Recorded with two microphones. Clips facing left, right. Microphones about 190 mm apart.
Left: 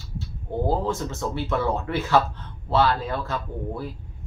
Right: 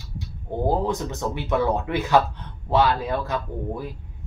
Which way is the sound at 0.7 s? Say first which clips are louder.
Right 3 dB; 15° right (ahead or behind).